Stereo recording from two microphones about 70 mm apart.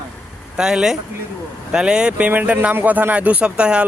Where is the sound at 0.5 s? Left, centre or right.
Centre.